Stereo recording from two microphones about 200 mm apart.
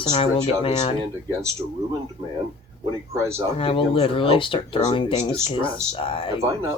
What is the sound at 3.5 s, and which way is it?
Speech, 25° left (ahead or behind).